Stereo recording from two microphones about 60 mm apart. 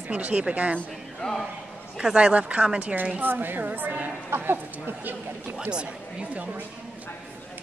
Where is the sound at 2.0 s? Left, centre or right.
Centre.